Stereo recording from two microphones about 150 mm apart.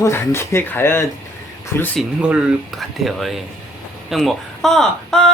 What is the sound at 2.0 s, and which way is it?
Speech, 5° right (ahead or behind).